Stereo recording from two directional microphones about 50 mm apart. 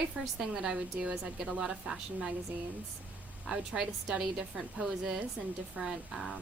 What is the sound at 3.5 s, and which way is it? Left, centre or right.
Speech, centre.